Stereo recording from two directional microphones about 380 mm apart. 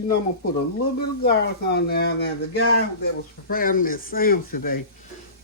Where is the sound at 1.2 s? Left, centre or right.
Left.